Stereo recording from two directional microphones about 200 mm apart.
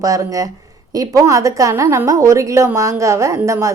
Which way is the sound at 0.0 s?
15° right (ahead or behind).